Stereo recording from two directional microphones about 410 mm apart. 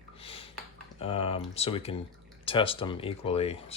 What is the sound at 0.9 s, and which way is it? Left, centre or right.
Speech, centre.